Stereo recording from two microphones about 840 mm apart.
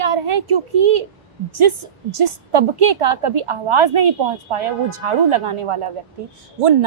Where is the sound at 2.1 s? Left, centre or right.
Right.